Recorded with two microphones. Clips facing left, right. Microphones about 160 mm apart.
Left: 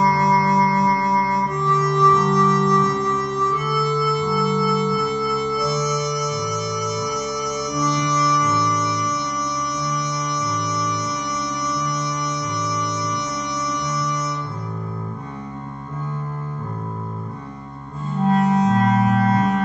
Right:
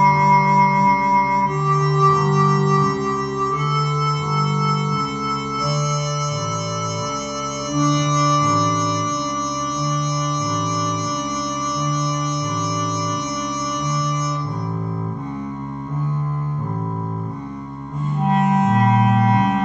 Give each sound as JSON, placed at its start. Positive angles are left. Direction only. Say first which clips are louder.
{"t": 0.0, "sound": "music", "louder": "right 2 dB", "side_deg": -20}
{"t": 7.8, "sound": "music", "louder": "right 3 dB", "side_deg": -20}
{"t": 18.2, "sound": "music", "louder": "left 1 dB", "side_deg": -20}